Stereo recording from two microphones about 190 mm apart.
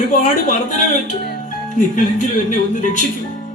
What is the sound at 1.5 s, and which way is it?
Speech, 40° left (ahead or behind).